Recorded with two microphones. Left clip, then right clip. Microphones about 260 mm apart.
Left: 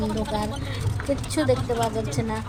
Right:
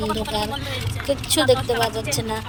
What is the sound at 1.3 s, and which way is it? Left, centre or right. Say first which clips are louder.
Speech: right 6 dB; right.